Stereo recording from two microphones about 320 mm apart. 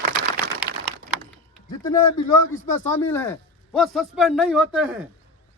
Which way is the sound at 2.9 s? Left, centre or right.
Centre.